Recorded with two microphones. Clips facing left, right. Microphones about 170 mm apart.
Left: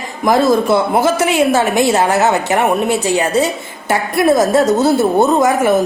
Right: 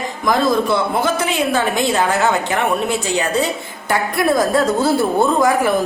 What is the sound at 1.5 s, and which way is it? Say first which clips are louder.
A woman's voice: left 4 dB; 40° left (ahead or behind).